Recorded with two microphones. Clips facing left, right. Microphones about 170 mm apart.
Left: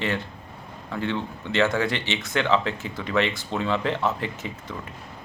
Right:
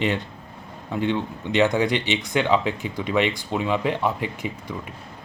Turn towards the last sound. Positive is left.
turn(degrees=-15)  # may be behind; listen again after turning